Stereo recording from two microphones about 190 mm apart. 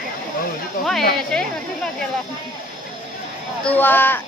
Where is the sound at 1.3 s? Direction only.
5° left (ahead or behind).